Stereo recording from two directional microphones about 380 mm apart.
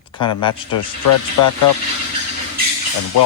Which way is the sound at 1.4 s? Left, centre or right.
Left.